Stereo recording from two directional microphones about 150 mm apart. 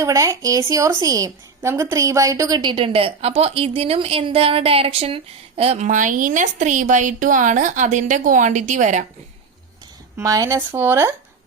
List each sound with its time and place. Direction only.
0.0 s a woman's voice: 20° right (ahead or behind); by 9.0 s 55° right (ahead or behind)
10.2 s a woman's voice: 25° right (ahead or behind)